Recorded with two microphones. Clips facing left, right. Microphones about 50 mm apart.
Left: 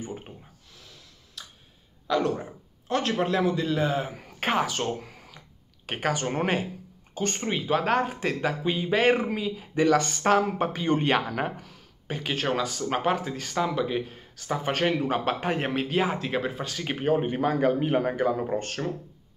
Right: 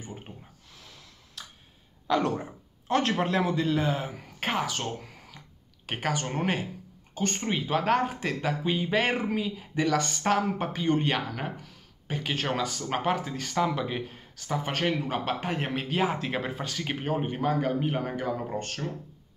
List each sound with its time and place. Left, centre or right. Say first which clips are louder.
2.0 s a man's voice: left 1 dB; centre
4.2 s speech: left 4 dB; centre
4.8 s a sound: left 4 dB; centre
5.9 s a man's voice: left 3 dB; centre
7.4 s speech: left 1 dB; centre
9.8 s a man's voice: left 4 dB; left
10.2 s speech: left 4 dB; centre; by 11.5 s left
12.1 s speech: left 2 dB; centre
13.6 s speech: left 1 dB; centre
14.3 s a man's voice: left 3 dB; left
15.7 s speech: left 2 dB; centre
16.2 s speech: left 2 dB; centre
16.6 s a man's voice: left 4 dB; centre; by 18.6 s left